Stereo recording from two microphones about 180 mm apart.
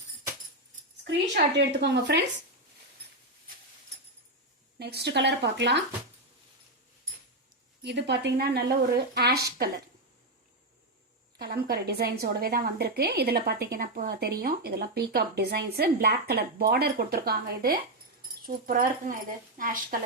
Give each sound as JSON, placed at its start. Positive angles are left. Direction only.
{"t": 1.0, "sound": "speech", "side_deg": -70}
{"t": 4.8, "sound": "speech", "side_deg": -65}
{"t": 7.8, "sound": "speech", "side_deg": -70}
{"t": 11.3, "sound": "speech", "side_deg": -60}